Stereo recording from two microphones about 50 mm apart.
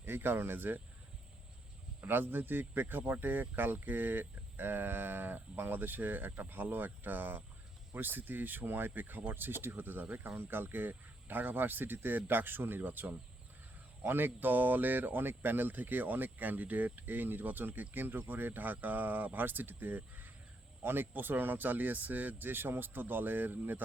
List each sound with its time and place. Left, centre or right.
0.0 s speech: right
2.0 s speech: right